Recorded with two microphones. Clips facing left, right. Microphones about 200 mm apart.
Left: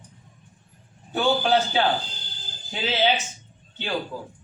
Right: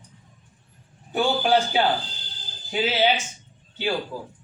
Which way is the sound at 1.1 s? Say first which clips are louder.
Even; 10° right (ahead or behind).